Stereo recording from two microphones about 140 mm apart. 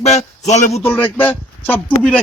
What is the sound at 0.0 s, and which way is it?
Speech, 50° left (ahead or behind).